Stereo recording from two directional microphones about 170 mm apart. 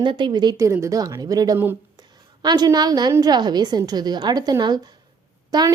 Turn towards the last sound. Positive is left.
turn(degrees=-20)  # may be behind; listen again after turning